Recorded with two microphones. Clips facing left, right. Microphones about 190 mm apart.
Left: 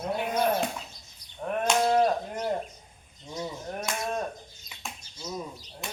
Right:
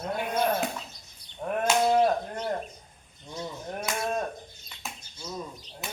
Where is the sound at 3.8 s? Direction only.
5° right (ahead or behind).